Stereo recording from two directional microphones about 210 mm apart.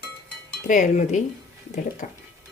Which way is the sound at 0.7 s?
35° left (ahead or behind).